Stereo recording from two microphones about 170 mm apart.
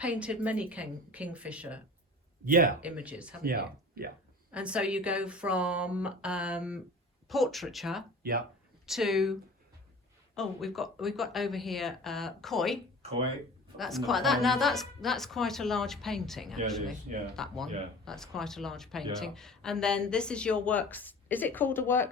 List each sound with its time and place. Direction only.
0.0 s speech: 5° right (ahead or behind)
2.4 s speech: 55° right (ahead or behind)
2.8 s speech: 10° right (ahead or behind)
3.4 s speech: 60° right (ahead or behind)
4.5 s a woman's voice: 5° right (ahead or behind); by 22.1 s 10° left (ahead or behind)